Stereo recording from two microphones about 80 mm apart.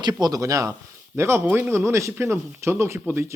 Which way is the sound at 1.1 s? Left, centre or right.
Right.